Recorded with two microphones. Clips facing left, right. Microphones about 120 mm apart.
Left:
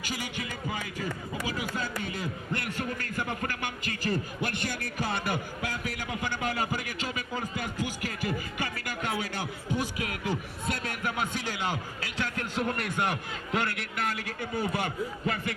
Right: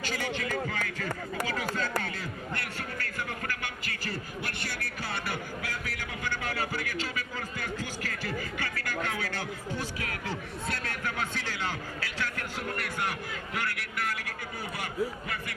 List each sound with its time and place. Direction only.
0.0 s speech: 15° left (ahead or behind)
0.7 s music: 15° left (ahead or behind)
2.0 s a sound: 15° left (ahead or behind)